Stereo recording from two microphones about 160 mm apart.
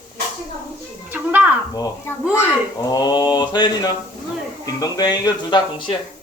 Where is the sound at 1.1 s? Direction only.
10° right (ahead or behind).